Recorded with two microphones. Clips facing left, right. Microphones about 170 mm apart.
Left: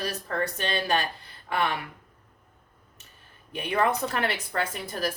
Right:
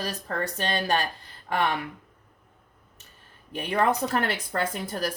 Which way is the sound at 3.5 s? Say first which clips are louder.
Right 1 dB; 40° right (ahead or behind).